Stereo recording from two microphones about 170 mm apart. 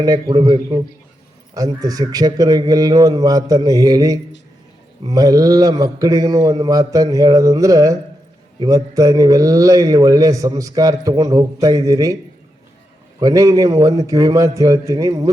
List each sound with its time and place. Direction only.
0.0 s a man's voice: 20° right (ahead or behind)
13.1 s a man's voice: 20° right (ahead or behind)